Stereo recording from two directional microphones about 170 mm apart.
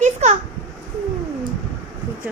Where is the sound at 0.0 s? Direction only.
40° right (ahead or behind).